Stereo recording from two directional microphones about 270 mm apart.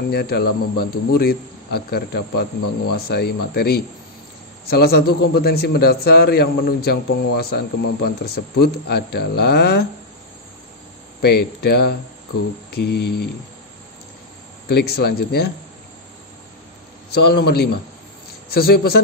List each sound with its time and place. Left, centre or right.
0.1 s a man's voice: left
11.1 s a man's voice: left
14.7 s a man's voice: left
17.1 s a man's voice: left